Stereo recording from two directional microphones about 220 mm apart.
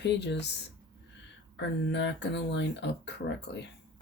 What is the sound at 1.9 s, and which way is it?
Speech, 50° left (ahead or behind).